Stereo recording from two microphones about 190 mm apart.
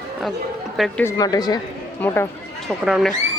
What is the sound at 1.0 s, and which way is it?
Speech, 20° left (ahead or behind).